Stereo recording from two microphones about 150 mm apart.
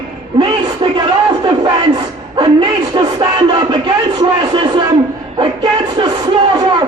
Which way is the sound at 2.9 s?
30° right (ahead or behind).